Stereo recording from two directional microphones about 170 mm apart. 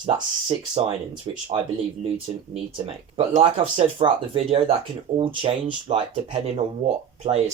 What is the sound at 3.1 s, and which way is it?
Speech, 35° right (ahead or behind).